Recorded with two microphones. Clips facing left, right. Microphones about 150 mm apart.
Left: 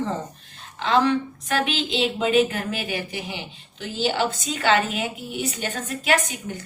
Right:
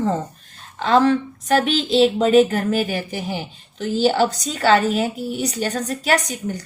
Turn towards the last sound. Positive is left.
turn(degrees=-40)  # may be behind; listen again after turning